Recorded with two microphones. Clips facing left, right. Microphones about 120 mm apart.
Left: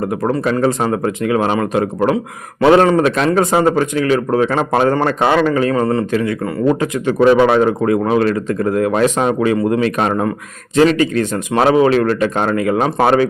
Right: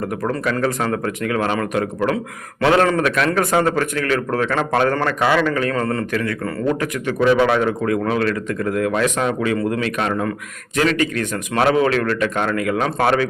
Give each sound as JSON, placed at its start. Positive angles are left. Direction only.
{"t": 0.3, "sound": "a man's voice", "side_deg": 25}